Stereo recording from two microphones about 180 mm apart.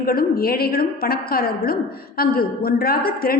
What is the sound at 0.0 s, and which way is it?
A woman's voice, 55° left (ahead or behind).